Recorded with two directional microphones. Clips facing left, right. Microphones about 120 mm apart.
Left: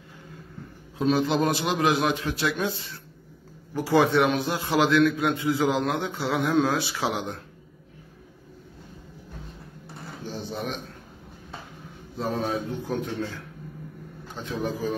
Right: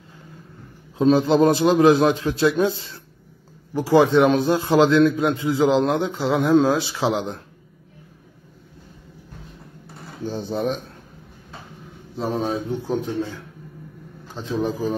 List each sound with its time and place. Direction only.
0.9 s a man's voice: 30° right (ahead or behind)
4.3 s a man's voice: 35° right (ahead or behind)
10.2 s speech: 30° right (ahead or behind)
12.2 s a man's voice: 25° right (ahead or behind)
14.3 s speech: 30° right (ahead or behind)